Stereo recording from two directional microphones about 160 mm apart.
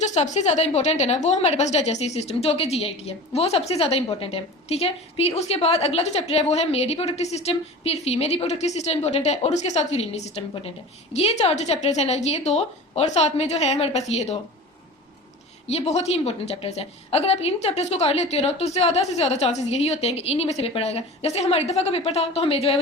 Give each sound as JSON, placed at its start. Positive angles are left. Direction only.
{"t": 0.1, "sound": "a woman's voice", "side_deg": 45}
{"t": 15.6, "sound": "a woman's voice", "side_deg": 40}